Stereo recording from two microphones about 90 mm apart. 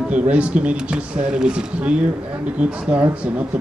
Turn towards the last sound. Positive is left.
turn(degrees=-15)  # may be behind; listen again after turning